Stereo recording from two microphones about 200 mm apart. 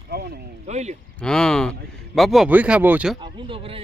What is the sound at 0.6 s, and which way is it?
Speech, 35° right (ahead or behind).